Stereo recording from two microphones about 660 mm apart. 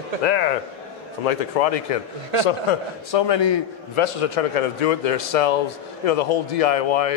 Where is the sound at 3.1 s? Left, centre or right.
Left.